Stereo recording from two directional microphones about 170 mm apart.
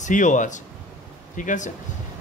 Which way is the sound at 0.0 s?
45° left (ahead or behind).